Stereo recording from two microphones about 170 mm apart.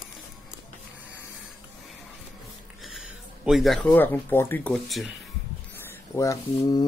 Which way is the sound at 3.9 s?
10° left (ahead or behind).